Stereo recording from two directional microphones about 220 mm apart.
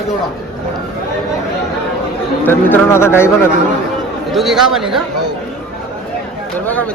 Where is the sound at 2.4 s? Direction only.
10° left (ahead or behind).